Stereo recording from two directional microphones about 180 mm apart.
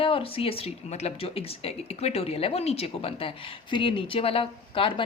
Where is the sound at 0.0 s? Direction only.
30° left (ahead or behind).